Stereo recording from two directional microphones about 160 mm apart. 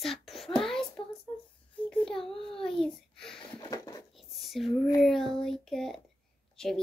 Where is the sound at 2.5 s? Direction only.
5° left (ahead or behind).